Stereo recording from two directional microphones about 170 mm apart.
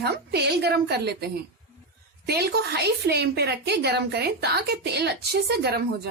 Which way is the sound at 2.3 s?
70° right (ahead or behind).